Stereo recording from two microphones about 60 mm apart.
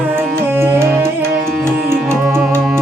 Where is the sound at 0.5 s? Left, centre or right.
Right.